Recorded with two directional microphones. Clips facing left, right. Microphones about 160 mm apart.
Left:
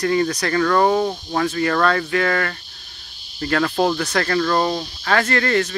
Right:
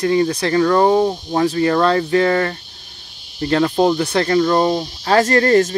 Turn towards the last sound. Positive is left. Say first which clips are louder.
# right 6 dB
turn(degrees=-35)  # may be behind; listen again after turning